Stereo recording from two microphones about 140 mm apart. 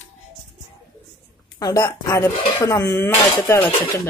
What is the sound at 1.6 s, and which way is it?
Speech, 25° left (ahead or behind).